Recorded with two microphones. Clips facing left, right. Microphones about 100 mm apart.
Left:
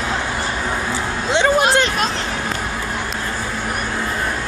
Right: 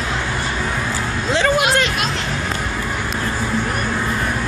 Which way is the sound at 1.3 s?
30° left (ahead or behind).